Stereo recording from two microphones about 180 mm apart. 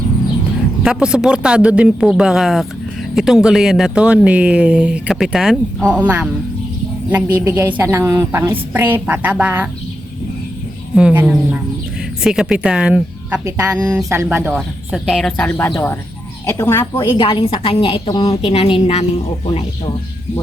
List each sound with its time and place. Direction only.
0.8 s a woman's voice: 5° right (ahead or behind)
10.9 s a woman's voice: 5° right (ahead or behind)
13.4 s a woman's voice: 20° right (ahead or behind); by 17.2 s 15° left (ahead or behind)
17.2 s a woman's voice: 25° left (ahead or behind)